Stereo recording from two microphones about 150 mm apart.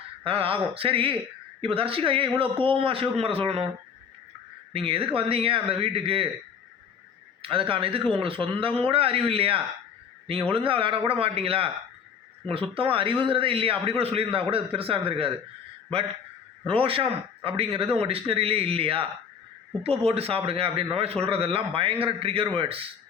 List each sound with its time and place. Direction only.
0.3 s a man's voice: 40° right (ahead or behind)
4.7 s a man's voice: 40° right (ahead or behind)
7.4 s a man's voice: 35° right (ahead or behind)
16.6 s a man's voice: 40° right (ahead or behind)